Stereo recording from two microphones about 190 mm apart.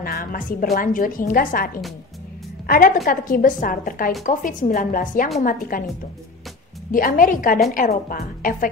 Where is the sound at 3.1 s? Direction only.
45° left (ahead or behind).